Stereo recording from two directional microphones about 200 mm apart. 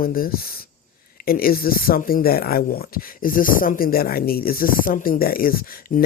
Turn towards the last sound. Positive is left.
turn(degrees=45)  # may be behind; listen again after turning